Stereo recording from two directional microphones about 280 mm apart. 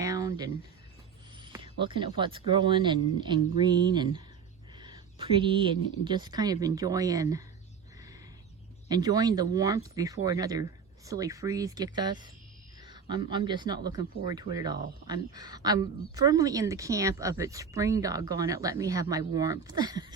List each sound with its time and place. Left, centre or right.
0.0 s a sound: centre
1.6 s speech: centre
8.9 s speech: centre